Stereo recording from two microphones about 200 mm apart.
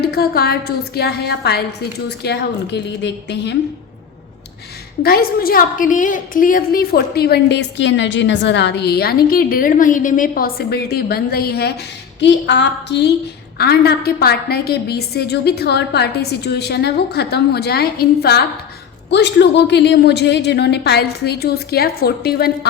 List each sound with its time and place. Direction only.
0.0 s a woman's voice: 50° left (ahead or behind)
5.0 s a woman's voice: 50° left (ahead or behind)